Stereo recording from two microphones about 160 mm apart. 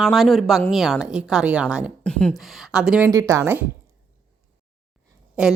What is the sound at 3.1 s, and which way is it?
Speech, 20° right (ahead or behind).